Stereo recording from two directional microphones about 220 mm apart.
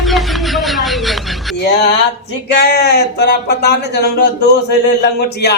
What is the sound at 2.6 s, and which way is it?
Speech, 45° left (ahead or behind).